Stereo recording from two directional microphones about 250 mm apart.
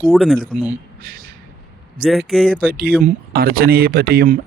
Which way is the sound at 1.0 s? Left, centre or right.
Right.